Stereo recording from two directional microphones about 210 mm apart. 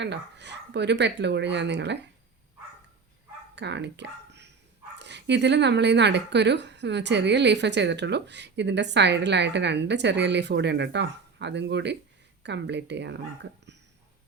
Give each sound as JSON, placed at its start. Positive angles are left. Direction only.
{"t": 0.0, "sound": "speech", "side_deg": -55}
{"t": 3.5, "sound": "speech", "side_deg": -55}